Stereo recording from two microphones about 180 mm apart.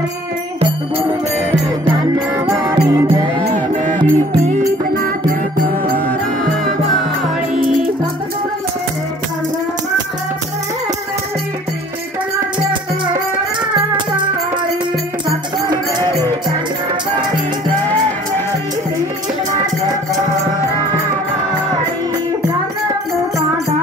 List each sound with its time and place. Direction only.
0.6 s music: 30° right (ahead or behind)
2.3 s music: 20° right (ahead or behind)
3.5 s music: 45° right (ahead or behind)